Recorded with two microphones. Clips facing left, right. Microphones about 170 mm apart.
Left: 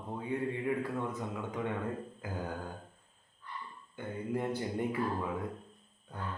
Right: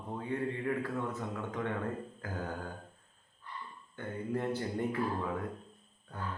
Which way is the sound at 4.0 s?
15° left (ahead or behind).